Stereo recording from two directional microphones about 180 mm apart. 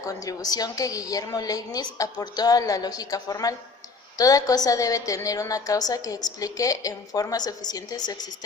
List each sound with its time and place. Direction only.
0.0 s a woman's voice: 20° left (ahead or behind)